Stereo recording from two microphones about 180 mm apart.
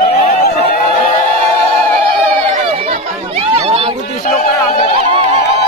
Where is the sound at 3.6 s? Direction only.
35° right (ahead or behind).